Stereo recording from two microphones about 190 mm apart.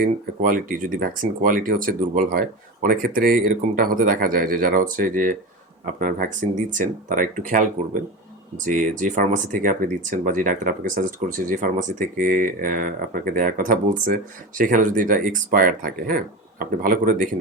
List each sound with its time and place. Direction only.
0.0 s speech: 45° right (ahead or behind)